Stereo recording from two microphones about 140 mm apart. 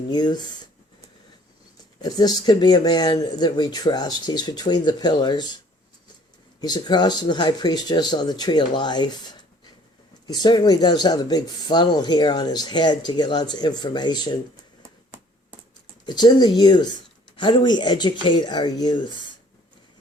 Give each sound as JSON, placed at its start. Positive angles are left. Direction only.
{"t": 0.1, "sound": "speech", "side_deg": 30}
{"t": 2.0, "sound": "speech", "side_deg": 30}
{"t": 6.6, "sound": "speech", "side_deg": 30}
{"t": 16.0, "sound": "speech", "side_deg": 30}